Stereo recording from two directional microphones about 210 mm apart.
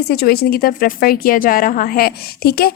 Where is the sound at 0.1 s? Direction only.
50° left (ahead or behind).